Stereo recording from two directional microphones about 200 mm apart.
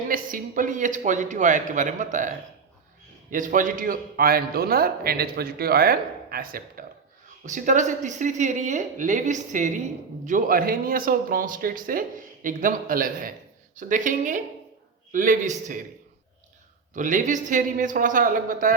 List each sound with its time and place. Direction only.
0.1 s a woman's voice: 45° right (ahead or behind)
16.9 s a woman's voice: 40° right (ahead or behind)